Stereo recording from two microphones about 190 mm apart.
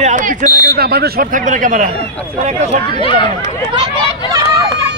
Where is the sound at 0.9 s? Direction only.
55° right (ahead or behind); by 2.8 s 35° right (ahead or behind).